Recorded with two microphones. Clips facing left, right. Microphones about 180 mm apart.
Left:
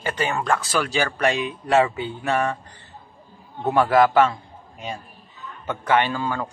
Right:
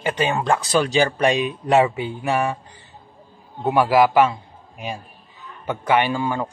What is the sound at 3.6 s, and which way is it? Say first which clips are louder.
A man's voice: right 1 dB; 10° right (ahead or behind).